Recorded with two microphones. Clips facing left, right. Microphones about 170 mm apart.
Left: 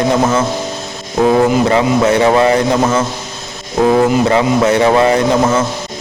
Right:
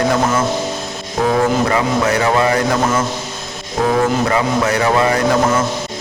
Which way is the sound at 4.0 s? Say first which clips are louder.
Left 4 dB; 25° left (ahead or behind).